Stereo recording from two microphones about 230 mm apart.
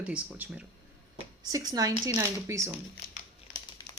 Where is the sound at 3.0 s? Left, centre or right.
Left.